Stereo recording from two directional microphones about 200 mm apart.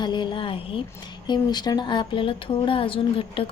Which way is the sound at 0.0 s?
25° left (ahead or behind).